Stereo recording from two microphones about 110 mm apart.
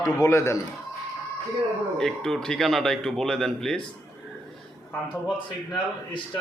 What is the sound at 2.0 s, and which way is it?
Speech, 5° left (ahead or behind).